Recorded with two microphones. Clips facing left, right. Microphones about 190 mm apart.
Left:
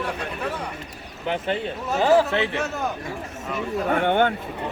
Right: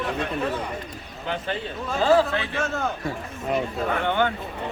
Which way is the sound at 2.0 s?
20° left (ahead or behind).